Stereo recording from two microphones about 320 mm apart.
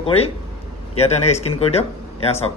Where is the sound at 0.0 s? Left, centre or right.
Centre.